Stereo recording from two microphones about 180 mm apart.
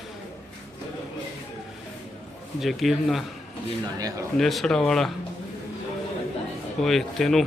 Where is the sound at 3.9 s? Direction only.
20° right (ahead or behind).